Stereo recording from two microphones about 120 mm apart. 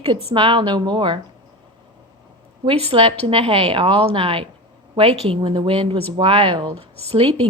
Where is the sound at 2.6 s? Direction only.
55° right (ahead or behind).